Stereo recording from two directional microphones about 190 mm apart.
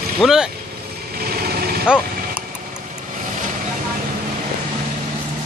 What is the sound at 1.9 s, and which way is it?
Speech, 5° right (ahead or behind).